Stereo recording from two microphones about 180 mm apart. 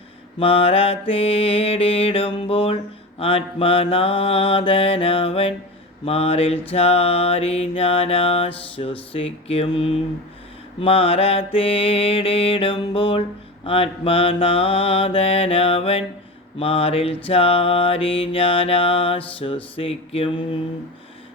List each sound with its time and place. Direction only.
0.3 s mantra: 30° left (ahead or behind)